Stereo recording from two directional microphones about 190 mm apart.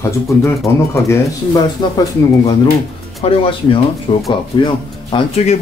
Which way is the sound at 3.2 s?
30° left (ahead or behind).